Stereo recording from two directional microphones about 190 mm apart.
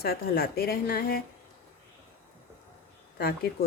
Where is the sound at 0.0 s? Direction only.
55° left (ahead or behind).